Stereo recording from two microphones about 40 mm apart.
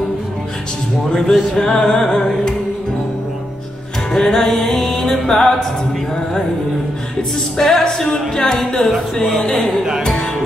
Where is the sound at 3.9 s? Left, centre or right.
Centre.